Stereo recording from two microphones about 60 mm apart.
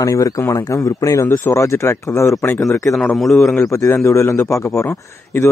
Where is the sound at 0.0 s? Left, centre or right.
Left.